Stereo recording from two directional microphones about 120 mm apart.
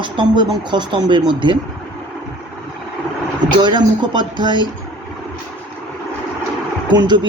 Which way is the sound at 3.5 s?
40° right (ahead or behind).